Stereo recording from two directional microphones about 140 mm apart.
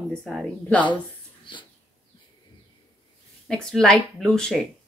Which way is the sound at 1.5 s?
35° left (ahead or behind).